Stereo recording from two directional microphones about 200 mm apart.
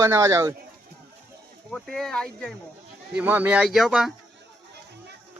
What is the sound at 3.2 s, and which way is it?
Speech, 10° right (ahead or behind).